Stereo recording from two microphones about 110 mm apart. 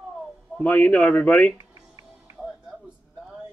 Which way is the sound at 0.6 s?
15° left (ahead or behind).